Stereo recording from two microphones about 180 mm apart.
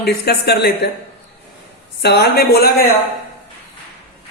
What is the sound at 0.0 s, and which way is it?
Speech, 65° left (ahead or behind).